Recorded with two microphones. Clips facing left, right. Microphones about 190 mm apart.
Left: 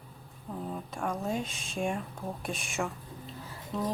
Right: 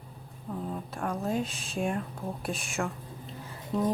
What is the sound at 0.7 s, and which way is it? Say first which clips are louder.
Speech: left 1 dB; centre (ahead or behind).